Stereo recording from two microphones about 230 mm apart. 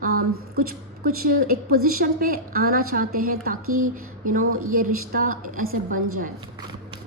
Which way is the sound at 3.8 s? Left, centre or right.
Right.